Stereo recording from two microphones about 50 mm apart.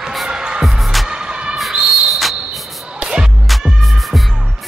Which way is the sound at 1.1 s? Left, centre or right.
Centre.